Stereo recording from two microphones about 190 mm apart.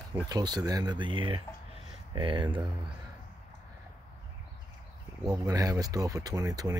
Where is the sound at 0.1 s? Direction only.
20° right (ahead or behind).